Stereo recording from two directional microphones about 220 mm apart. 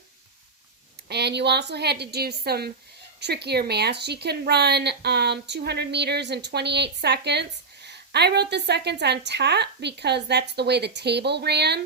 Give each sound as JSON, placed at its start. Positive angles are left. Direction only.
{"t": 1.0, "sound": "a woman's voice", "side_deg": -50}